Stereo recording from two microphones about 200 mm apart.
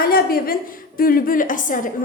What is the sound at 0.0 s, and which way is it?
A man's voice, 50° left (ahead or behind).